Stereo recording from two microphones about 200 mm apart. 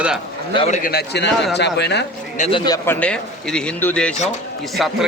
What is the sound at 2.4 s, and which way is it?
A man's voice, 25° left (ahead or behind).